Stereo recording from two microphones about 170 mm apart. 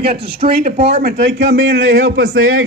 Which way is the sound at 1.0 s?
90° right.